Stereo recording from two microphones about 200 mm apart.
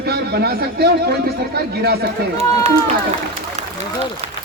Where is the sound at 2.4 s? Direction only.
35° right (ahead or behind).